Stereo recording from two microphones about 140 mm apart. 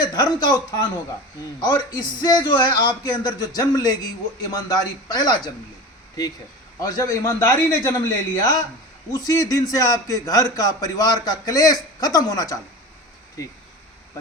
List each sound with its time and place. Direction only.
0.0 s a man's voice: 30° left (ahead or behind)
6.7 s a man's voice: 25° left (ahead or behind)